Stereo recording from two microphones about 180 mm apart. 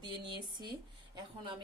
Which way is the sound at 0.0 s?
25° right (ahead or behind).